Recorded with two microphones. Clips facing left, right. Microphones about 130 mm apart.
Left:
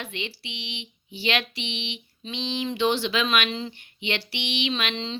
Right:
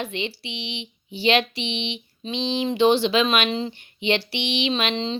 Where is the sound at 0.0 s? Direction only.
25° right (ahead or behind).